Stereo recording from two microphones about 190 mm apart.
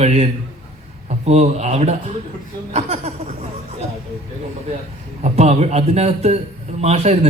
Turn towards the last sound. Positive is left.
turn(degrees=-35)  # may be behind; listen again after turning